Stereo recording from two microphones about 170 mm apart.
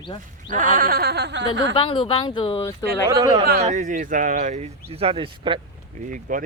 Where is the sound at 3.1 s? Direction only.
20° right (ahead or behind).